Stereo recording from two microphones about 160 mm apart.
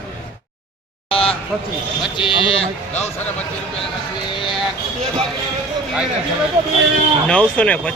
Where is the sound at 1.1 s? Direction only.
35° left (ahead or behind).